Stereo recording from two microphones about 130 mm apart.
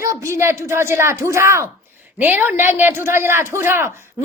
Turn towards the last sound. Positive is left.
turn(degrees=-20)  # may be behind; listen again after turning